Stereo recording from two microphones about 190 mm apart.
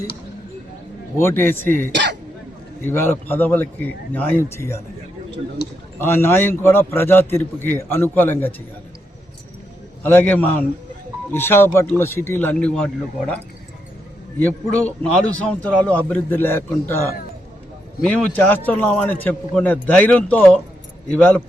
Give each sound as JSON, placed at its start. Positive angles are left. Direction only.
{"t": 1.1, "sound": "a man's voice", "side_deg": 15}
{"t": 5.6, "sound": "a man's voice", "side_deg": 60}
{"t": 6.0, "sound": "a man's voice", "side_deg": 10}
{"t": 10.0, "sound": "a man's voice", "side_deg": 10}
{"t": 18.0, "sound": "a man's voice", "side_deg": 10}